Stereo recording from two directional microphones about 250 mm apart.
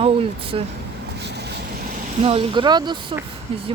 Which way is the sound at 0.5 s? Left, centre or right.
Right.